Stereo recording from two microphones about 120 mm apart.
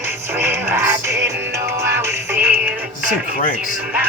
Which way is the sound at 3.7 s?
10° right (ahead or behind).